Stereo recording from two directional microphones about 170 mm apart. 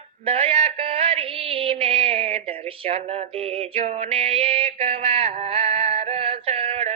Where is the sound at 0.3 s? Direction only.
35° right (ahead or behind).